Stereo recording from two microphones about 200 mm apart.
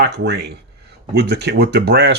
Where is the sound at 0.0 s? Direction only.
55° right (ahead or behind).